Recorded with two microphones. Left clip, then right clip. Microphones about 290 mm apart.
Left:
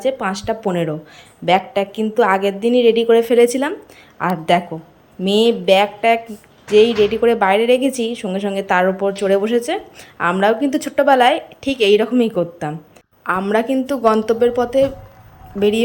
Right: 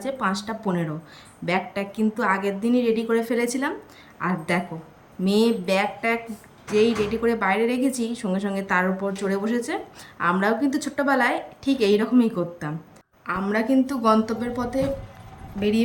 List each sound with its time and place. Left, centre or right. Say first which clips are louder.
0.0 s a woman's voice: left 7 dB; centre